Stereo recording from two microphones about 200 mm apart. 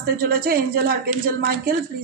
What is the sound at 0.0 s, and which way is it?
Speech, 50° right (ahead or behind).